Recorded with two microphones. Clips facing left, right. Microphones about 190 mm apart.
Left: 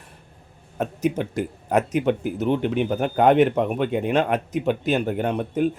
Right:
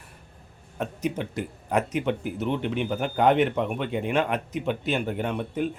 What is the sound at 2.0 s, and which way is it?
Speech, 40° left (ahead or behind).